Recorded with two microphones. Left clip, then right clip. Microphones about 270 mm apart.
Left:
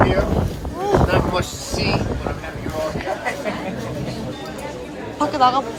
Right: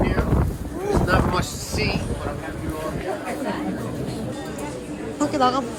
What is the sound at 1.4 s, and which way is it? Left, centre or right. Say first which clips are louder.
Speech: left 2 dB; right.